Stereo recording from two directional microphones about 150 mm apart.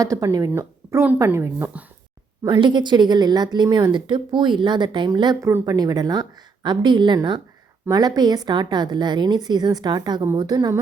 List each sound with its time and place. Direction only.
0.0 s speech: 20° right (ahead or behind)
2.4 s a woman's voice: 30° right (ahead or behind)
5.5 s speech: 15° right (ahead or behind)
5.7 s a woman's voice: 25° right (ahead or behind)